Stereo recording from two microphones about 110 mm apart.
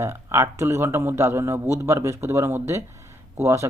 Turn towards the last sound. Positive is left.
turn(degrees=-25)  # may be behind; listen again after turning